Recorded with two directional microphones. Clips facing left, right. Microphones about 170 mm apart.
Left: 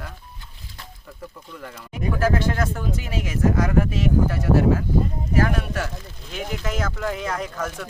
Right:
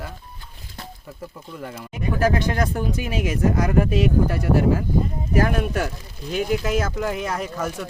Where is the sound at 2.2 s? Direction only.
15° right (ahead or behind).